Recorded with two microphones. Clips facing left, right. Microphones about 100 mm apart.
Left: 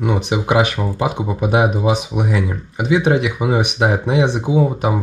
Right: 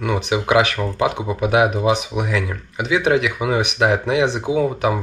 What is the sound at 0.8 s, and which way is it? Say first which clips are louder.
Speech: even; 10° left (ahead or behind).